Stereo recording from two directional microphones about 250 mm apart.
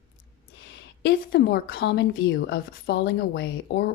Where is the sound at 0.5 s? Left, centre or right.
Left.